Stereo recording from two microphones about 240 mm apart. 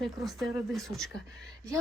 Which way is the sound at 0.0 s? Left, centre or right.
Centre.